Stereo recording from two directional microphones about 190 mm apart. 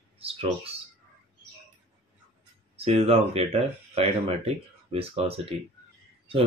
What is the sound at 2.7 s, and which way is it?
Speech, 30° right (ahead or behind).